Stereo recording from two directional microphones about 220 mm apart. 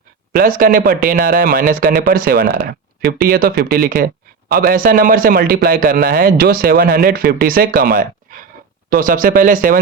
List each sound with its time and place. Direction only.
0.3 s a man's voice: 40° right (ahead or behind)